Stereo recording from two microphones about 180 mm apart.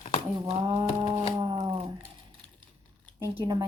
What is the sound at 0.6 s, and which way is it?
A woman's voice, 25° right (ahead or behind).